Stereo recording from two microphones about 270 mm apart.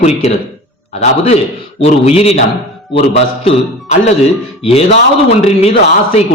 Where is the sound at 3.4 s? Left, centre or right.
Left.